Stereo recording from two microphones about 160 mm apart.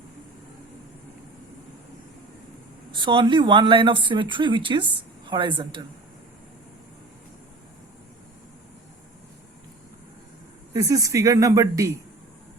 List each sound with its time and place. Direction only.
2.9 s speech: 30° right (ahead or behind)
10.8 s speech: 20° right (ahead or behind)